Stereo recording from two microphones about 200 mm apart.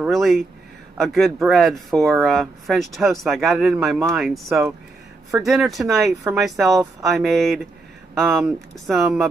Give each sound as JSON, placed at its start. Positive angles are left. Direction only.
{"t": 0.0, "sound": "speech", "side_deg": 0}
{"t": 6.6, "sound": "speech", "side_deg": -15}
{"t": 7.2, "sound": "speech", "side_deg": 0}